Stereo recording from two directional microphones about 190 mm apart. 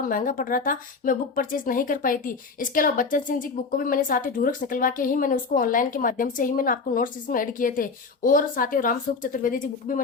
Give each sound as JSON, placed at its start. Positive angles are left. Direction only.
{"t": 0.0, "sound": "speech", "side_deg": 45}